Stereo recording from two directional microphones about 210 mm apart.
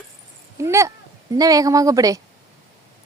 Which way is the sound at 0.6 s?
15° right (ahead or behind).